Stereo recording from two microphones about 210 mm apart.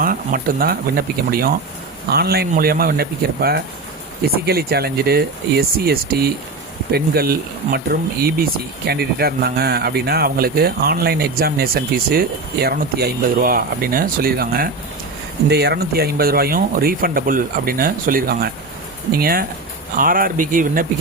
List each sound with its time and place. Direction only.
0.0 s speech: 40° right (ahead or behind)